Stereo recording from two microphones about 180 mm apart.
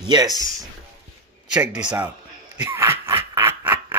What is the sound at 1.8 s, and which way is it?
Speech, 15° right (ahead or behind).